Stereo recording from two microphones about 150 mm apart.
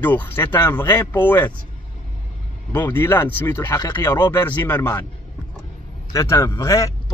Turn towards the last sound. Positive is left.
turn(degrees=20)  # may be behind; listen again after turning